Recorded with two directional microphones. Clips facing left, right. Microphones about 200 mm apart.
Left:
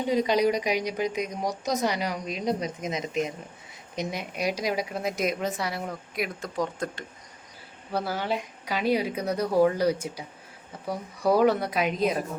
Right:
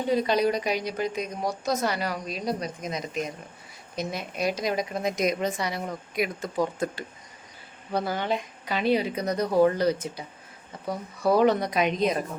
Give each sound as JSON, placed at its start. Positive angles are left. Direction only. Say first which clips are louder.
{"t": 0.1, "sound": "a woman's voice", "louder": "even", "side_deg": 15}
{"t": 7.9, "sound": "a woman's voice", "louder": "right 1 dB", "side_deg": 5}